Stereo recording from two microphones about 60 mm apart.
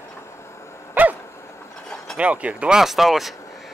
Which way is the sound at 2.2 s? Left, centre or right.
Right.